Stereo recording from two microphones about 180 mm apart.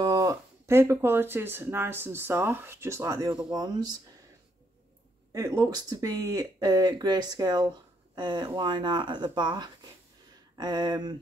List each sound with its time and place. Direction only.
0.0 s speech: 20° right (ahead or behind)
5.3 s speech: 20° right (ahead or behind)